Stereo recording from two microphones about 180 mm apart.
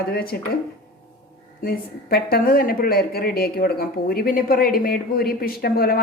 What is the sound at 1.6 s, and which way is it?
A woman's voice, 55° left (ahead or behind).